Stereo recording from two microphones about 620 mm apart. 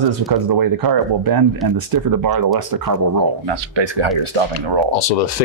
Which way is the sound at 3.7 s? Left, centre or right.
Right.